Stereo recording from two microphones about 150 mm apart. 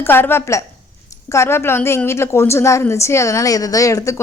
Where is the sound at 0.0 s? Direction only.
15° left (ahead or behind).